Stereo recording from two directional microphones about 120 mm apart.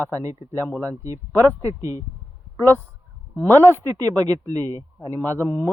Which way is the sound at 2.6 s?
15° left (ahead or behind).